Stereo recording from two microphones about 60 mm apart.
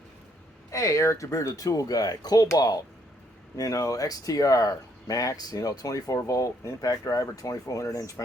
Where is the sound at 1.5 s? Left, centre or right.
Left.